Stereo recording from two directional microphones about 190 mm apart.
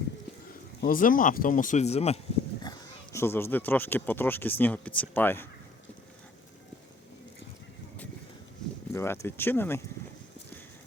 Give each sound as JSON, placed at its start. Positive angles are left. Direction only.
{"t": 0.8, "sound": "speech", "side_deg": 45}
{"t": 2.6, "sound": "speech", "side_deg": 15}
{"t": 8.9, "sound": "speech", "side_deg": 15}